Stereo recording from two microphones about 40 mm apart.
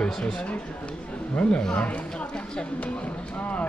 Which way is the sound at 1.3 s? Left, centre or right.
Left.